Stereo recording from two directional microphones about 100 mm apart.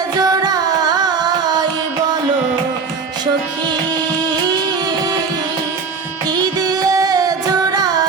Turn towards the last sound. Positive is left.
turn(degrees=-40)  # may be behind; listen again after turning